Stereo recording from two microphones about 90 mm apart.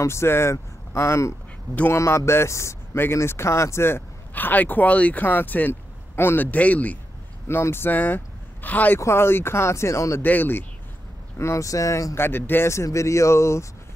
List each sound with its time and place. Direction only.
0.0 s speech: 30° left (ahead or behind)
7.4 s speech: 25° left (ahead or behind)
10.2 s speech: 20° left (ahead or behind)
11.3 s speech: 30° left (ahead or behind)
12.2 s speech: 25° left (ahead or behind)